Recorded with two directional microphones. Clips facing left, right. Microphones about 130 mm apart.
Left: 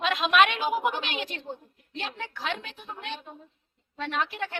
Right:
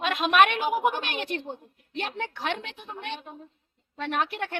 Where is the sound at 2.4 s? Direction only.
65° right (ahead or behind).